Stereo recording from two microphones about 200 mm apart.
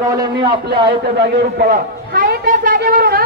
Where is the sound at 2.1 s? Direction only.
40° right (ahead or behind).